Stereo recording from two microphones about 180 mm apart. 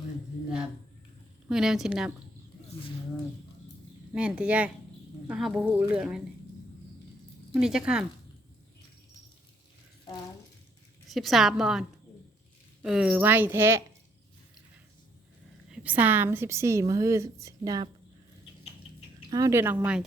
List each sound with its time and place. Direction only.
1.5 s speech: 5° right (ahead or behind)
4.1 s a woman's voice: 5° right (ahead or behind)
7.5 s speech: 5° right (ahead or behind)
11.1 s a woman's voice: centre (ahead or behind)
15.7 s a woman's voice: 10° right (ahead or behind)
19.3 s a woman's voice: 20° right (ahead or behind)